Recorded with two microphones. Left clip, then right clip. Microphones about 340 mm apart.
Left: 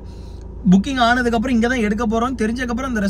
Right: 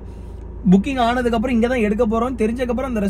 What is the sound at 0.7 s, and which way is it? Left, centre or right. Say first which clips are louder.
Speech: left 1 dB; left.